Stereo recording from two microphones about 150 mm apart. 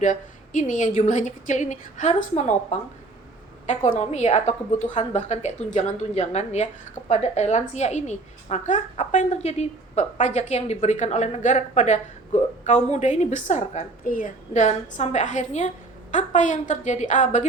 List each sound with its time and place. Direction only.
0.0 s a woman's voice: 55° left (ahead or behind)
3.9 s a woman's voice: 50° left (ahead or behind)